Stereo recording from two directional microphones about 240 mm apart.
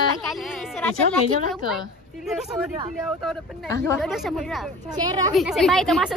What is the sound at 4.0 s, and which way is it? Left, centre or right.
Speech, centre.